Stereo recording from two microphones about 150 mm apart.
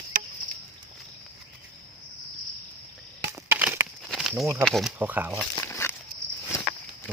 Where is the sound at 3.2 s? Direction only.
15° right (ahead or behind).